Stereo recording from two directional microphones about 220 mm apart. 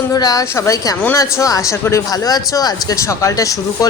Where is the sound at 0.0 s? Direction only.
15° left (ahead or behind).